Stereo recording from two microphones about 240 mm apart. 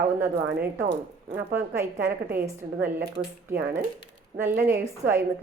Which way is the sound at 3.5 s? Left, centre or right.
Right.